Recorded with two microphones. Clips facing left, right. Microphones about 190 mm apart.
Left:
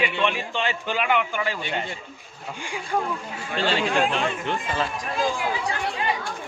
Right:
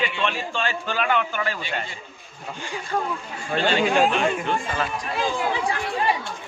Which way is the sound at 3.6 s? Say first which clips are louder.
Right 2 dB; 30° left (ahead or behind).